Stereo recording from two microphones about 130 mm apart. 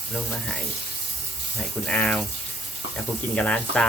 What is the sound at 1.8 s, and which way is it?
Speech, 10° left (ahead or behind).